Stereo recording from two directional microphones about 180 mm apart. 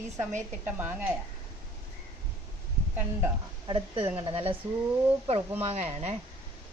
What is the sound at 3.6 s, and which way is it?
Speech, 25° right (ahead or behind).